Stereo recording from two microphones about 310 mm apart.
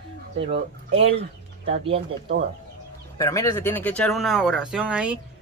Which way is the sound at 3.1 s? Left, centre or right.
Centre.